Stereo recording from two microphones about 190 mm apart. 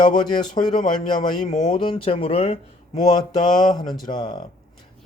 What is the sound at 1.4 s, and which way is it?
Speech, 40° left (ahead or behind).